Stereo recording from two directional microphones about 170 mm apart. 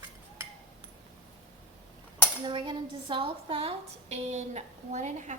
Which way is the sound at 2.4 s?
25° right (ahead or behind).